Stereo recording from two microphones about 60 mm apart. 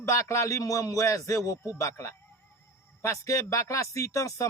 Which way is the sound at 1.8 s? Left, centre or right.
Left.